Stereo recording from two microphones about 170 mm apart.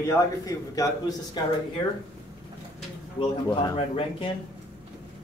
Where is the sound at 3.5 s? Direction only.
25° left (ahead or behind).